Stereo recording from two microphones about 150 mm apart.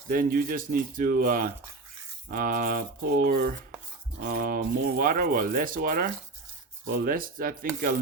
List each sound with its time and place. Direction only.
0.1 s speech: 70° right (ahead or behind)